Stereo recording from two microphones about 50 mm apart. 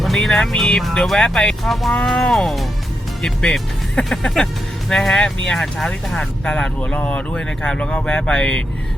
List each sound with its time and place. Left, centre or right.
0.0 s speech: centre
1.2 s speech: centre
1.6 s speech: centre
6.9 s speech: left
7.3 s speech: centre